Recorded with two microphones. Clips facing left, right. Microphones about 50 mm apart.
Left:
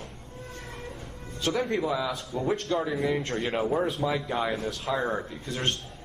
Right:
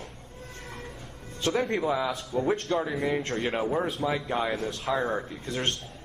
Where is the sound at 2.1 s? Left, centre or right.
Centre.